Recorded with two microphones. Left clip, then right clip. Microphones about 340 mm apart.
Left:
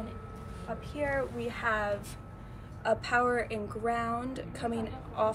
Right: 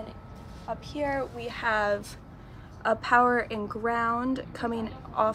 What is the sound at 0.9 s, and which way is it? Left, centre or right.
A woman's voice, centre.